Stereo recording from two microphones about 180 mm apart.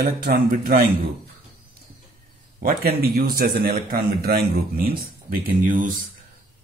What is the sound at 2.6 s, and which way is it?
A man's voice, 55° right (ahead or behind).